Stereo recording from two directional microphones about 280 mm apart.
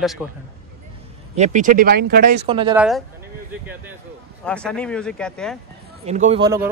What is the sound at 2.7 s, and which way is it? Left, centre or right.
Speech, centre.